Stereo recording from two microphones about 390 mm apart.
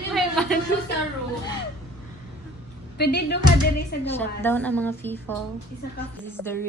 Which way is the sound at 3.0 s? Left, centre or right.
Left.